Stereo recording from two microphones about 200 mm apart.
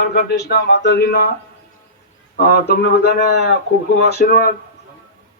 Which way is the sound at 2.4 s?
55° left (ahead or behind).